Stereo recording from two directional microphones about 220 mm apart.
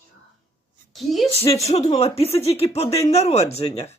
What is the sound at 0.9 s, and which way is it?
Speech, centre (ahead or behind).